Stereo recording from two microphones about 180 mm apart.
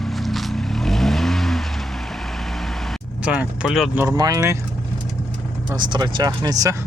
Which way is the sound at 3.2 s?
5° right (ahead or behind).